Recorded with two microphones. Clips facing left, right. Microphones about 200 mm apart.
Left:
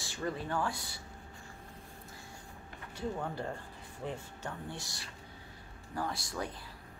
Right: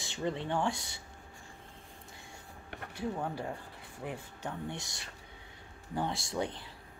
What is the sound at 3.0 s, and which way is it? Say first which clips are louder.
Speech: right 1 dB; 10° right (ahead or behind).